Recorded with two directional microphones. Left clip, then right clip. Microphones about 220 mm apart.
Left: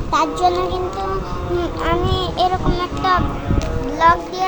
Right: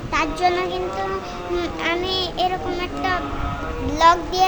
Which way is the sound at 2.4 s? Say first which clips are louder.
Left 4 dB; 25° right (ahead or behind).